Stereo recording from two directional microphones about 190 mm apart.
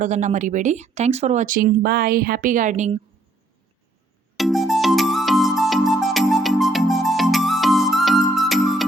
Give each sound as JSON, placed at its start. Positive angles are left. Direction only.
{"t": 0.0, "sound": "speech", "side_deg": -40}
{"t": 4.4, "sound": "music", "side_deg": 0}